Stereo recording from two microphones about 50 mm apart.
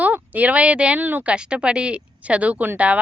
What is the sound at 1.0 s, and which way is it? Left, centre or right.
Speech, right.